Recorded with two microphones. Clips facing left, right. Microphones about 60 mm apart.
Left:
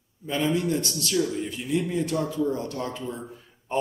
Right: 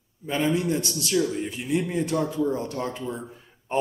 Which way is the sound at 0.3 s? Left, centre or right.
Centre.